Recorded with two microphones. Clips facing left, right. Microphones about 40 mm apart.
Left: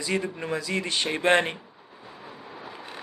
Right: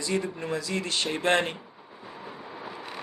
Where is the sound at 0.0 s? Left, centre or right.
Left.